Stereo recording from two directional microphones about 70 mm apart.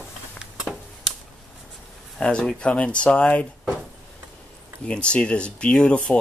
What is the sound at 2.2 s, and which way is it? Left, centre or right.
Speech, centre.